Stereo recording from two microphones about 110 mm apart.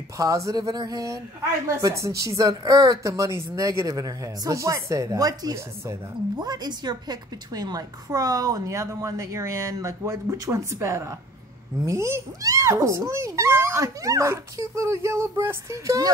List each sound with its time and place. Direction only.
0.2 s a child's voice: 30° right (ahead or behind)